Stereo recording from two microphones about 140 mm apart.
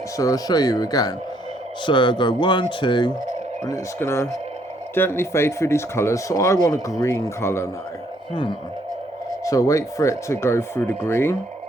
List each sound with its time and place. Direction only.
0.2 s speech: 25° left (ahead or behind)
3.7 s speech: 20° left (ahead or behind)
9.4 s speech: 25° left (ahead or behind)